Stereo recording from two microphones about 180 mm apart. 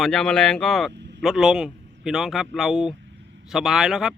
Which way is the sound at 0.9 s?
75° right (ahead or behind).